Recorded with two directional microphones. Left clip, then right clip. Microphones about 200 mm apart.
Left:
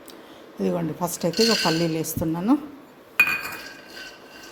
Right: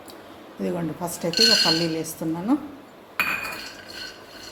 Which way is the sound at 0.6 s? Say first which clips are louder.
Left 3 dB; 35° left (ahead or behind).